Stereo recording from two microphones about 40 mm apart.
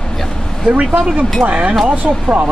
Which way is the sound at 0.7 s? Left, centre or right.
Right.